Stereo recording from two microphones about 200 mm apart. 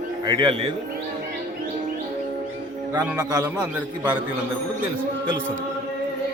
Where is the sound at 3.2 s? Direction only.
15° right (ahead or behind).